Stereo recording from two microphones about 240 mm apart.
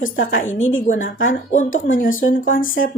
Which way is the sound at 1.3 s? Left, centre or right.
Left.